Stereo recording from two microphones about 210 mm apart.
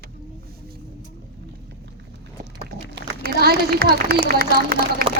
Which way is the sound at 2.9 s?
50° right (ahead or behind).